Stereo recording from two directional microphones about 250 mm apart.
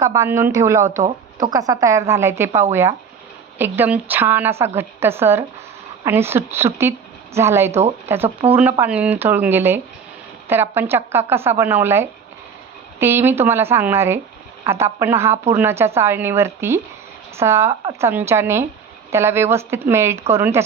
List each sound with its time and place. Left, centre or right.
0.0 s speech: centre
7.7 s speech: right
8.0 s speech: centre